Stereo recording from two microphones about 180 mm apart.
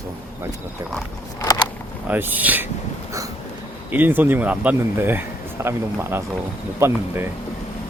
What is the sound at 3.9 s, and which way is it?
Speech, 10° right (ahead or behind).